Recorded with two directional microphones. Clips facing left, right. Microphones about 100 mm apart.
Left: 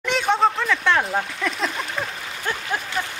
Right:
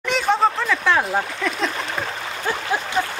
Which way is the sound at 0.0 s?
Centre (ahead or behind).